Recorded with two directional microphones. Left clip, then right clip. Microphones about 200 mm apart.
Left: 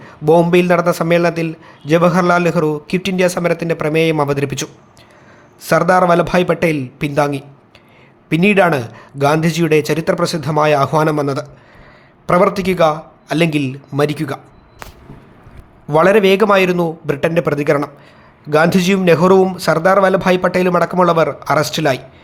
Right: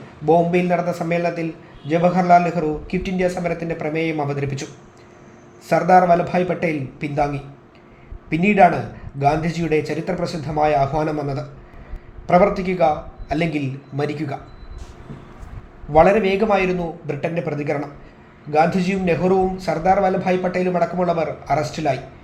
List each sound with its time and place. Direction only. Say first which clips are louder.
0.3 s a man's voice: left 5 dB; 40° left (ahead or behind)
15.9 s a man's voice: left 4 dB; 35° left (ahead or behind)